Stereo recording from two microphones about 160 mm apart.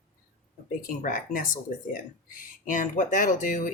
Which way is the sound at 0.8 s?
60° left (ahead or behind).